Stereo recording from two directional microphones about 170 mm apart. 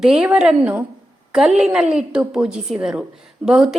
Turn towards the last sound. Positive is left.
turn(degrees=-5)  # may be behind; listen again after turning